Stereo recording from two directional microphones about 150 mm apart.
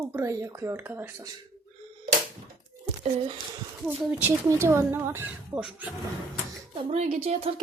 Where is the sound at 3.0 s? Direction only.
45° right (ahead or behind).